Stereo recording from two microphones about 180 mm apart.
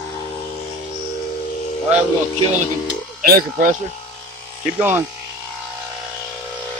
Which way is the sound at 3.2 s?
50° right (ahead or behind).